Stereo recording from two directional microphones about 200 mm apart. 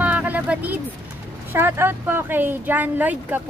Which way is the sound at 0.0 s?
5° right (ahead or behind).